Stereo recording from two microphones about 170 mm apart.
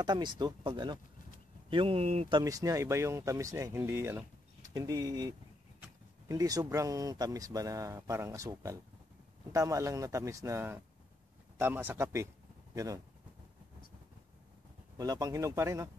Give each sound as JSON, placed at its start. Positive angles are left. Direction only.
{"t": 0.0, "sound": "speech", "side_deg": -25}
{"t": 2.3, "sound": "speech", "side_deg": -20}
{"t": 15.0, "sound": "speech", "side_deg": -20}